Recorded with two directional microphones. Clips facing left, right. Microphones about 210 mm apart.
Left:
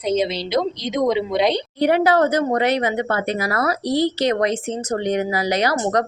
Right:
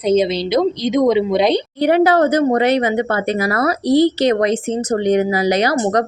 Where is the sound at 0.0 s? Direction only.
15° right (ahead or behind).